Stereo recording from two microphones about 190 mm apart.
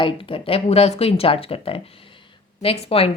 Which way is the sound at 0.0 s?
30° left (ahead or behind).